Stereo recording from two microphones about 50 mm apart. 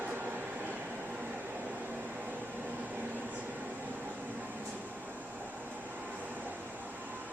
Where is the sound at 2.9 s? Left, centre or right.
Right.